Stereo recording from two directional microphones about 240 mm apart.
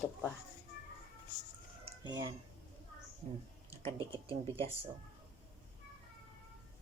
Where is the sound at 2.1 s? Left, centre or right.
Centre.